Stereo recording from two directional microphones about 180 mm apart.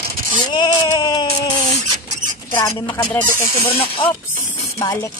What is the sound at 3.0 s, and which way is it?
Speech, 5° left (ahead or behind).